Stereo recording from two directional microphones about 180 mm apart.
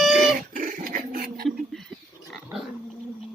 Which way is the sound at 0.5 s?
50° right (ahead or behind).